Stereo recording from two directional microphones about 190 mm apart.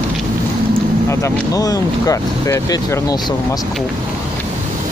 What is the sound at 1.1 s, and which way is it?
Speech, 15° left (ahead or behind).